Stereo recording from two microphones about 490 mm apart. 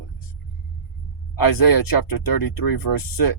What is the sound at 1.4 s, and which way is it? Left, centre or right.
Speech, left.